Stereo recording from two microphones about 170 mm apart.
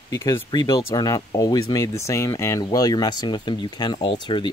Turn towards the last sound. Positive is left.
turn(degrees=25)  # may be behind; listen again after turning